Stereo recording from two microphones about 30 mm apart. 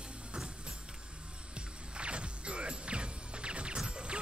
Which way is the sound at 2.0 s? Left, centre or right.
Right.